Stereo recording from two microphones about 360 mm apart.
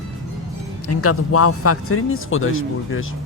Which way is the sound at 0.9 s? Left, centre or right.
Left.